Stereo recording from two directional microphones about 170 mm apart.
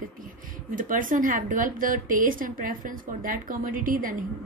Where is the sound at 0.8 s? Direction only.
50° right (ahead or behind).